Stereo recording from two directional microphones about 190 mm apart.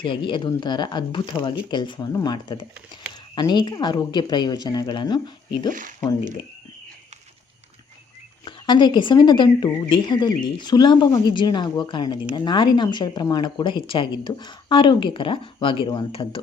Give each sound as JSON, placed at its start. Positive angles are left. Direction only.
{"t": 0.0, "sound": "speech", "side_deg": 25}
{"t": 8.4, "sound": "speech", "side_deg": 25}